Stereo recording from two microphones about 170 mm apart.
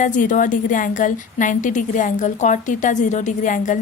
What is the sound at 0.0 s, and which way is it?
A woman's voice, 50° left (ahead or behind).